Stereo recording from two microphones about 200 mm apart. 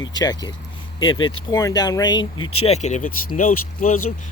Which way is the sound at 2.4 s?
90° left.